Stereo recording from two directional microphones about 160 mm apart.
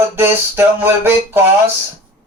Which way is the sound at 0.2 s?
15° right (ahead or behind).